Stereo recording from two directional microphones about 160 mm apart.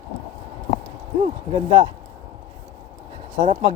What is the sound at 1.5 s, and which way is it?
Speech, 30° right (ahead or behind).